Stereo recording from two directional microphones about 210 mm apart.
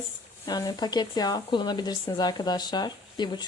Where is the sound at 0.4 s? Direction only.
20° left (ahead or behind).